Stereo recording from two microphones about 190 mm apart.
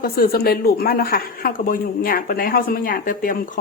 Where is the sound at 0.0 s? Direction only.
55° left (ahead or behind).